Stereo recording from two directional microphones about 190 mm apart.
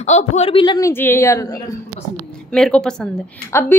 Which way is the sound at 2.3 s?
5° left (ahead or behind).